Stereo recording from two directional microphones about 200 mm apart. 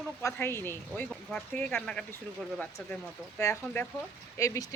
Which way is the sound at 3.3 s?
10° left (ahead or behind).